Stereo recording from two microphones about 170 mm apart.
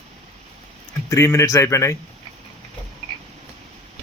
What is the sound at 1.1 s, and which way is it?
Speech, 15° left (ahead or behind).